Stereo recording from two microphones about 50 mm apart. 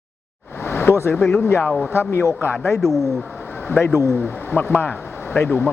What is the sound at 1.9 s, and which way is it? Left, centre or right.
Speech, left.